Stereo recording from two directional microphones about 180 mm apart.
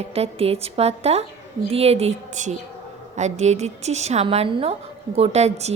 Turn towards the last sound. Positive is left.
turn(degrees=-35)  # may be behind; listen again after turning